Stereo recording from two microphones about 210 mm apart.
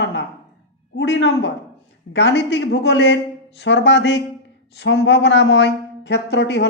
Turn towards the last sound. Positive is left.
turn(degrees=55)  # may be behind; listen again after turning